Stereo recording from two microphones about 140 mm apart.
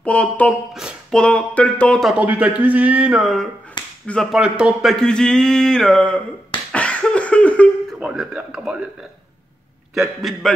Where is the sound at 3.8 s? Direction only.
35° left (ahead or behind).